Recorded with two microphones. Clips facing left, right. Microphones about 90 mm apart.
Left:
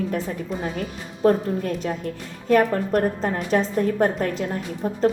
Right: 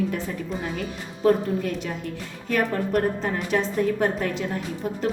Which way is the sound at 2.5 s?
40° left (ahead or behind).